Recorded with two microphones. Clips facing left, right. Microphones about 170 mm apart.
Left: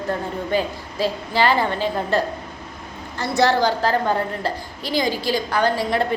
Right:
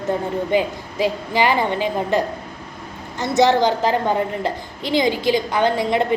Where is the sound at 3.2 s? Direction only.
20° right (ahead or behind).